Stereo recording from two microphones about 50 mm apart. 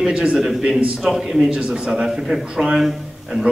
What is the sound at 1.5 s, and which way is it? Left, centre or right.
Speech, centre.